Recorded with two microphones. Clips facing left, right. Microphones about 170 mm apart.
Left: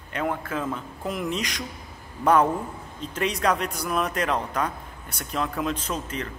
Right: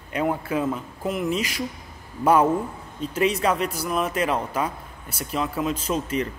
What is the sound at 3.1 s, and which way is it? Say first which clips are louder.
Speech: right 2 dB; 5° right (ahead or behind).